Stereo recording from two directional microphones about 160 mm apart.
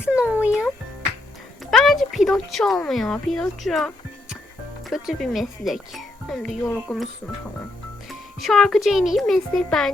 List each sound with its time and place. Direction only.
0.0 s a child's voice: 10° right (ahead or behind)
1.7 s speech: centre (ahead or behind)
8.4 s speech: centre (ahead or behind)